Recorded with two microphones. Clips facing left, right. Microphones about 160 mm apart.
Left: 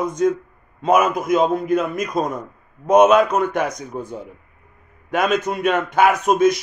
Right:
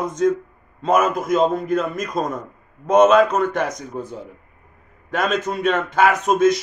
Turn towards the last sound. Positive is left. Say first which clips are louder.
# left 1 dB
turn(degrees=15)  # may be behind; listen again after turning